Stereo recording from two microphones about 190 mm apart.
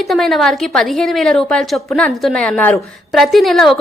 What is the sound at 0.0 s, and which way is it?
A woman's voice, centre (ahead or behind).